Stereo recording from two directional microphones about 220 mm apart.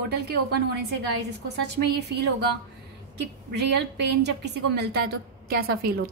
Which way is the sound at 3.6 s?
50° right (ahead or behind).